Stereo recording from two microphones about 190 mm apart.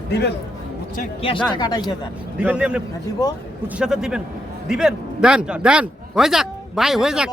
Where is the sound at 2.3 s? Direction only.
5° right (ahead or behind).